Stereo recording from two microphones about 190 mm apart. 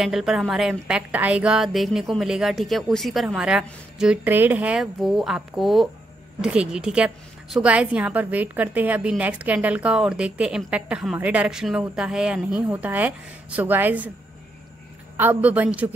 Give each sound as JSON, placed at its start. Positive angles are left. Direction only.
{"t": 0.0, "sound": "a woman's voice", "side_deg": 0}
{"t": 15.1, "sound": "a woman's voice", "side_deg": -10}